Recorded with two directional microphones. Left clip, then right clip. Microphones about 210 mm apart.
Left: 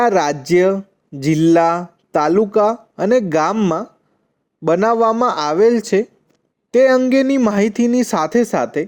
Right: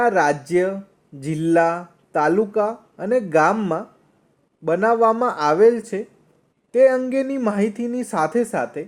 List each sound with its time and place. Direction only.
0.0 s speech: 35° left (ahead or behind)